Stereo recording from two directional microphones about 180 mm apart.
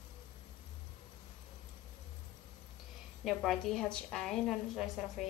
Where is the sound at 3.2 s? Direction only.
Centre (ahead or behind).